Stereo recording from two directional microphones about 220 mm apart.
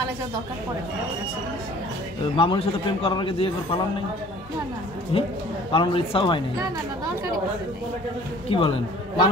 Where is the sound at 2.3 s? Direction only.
25° left (ahead or behind).